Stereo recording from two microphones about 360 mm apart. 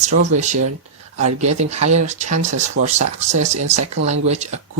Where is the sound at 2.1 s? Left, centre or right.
Centre.